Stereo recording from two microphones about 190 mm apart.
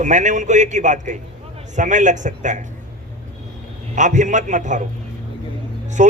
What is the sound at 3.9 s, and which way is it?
Speech, 40° right (ahead or behind).